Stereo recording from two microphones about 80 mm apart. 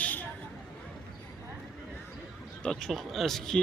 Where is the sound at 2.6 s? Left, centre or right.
Centre.